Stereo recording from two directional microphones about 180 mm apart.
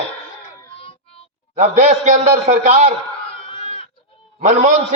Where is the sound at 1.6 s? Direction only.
40° right (ahead or behind).